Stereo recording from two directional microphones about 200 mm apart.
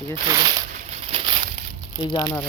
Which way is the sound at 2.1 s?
20° left (ahead or behind).